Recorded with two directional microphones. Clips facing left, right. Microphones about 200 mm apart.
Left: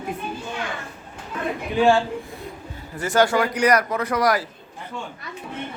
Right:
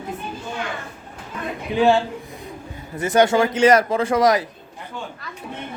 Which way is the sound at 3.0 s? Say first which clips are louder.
Right 3 dB; 20° right (ahead or behind).